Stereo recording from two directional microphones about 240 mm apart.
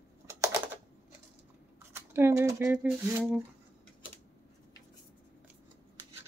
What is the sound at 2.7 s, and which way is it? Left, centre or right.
Speech, centre.